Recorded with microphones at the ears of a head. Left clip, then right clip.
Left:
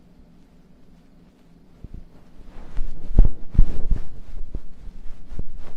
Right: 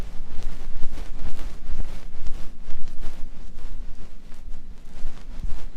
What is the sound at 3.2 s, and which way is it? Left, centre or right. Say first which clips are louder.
Heart sounds: left 16 dB; left.